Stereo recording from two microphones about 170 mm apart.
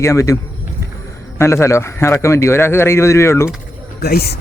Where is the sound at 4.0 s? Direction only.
65° left (ahead or behind).